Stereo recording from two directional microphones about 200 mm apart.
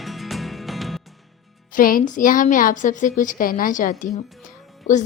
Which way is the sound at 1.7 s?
45° left (ahead or behind).